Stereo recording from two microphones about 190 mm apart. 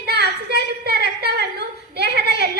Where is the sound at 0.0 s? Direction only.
60° right (ahead or behind).